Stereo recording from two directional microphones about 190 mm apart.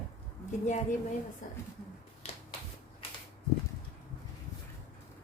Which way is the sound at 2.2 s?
35° left (ahead or behind).